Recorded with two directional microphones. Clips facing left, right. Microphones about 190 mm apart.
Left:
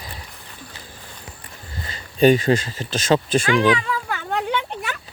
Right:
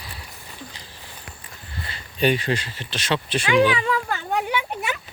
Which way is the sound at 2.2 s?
45° left (ahead or behind).